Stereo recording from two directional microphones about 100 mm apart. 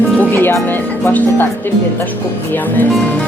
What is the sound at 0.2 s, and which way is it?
Speech, 20° left (ahead or behind).